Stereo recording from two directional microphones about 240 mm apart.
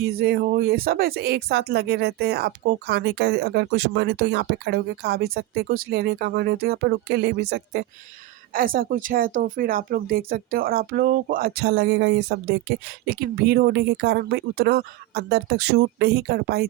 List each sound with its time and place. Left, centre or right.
0.0 s speech: right